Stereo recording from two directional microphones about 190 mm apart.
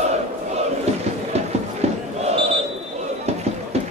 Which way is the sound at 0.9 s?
35° right (ahead or behind).